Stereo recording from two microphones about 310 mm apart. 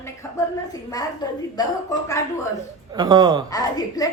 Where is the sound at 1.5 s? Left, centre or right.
Centre.